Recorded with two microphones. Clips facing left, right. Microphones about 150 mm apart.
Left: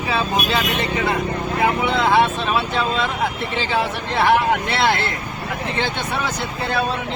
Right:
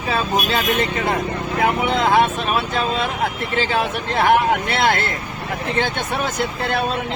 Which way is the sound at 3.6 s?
50° right (ahead or behind).